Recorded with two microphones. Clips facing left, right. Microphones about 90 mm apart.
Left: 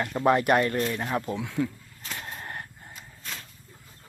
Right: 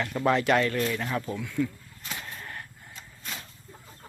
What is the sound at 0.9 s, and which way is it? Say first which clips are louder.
Speech: left 2 dB; 25° left (ahead or behind).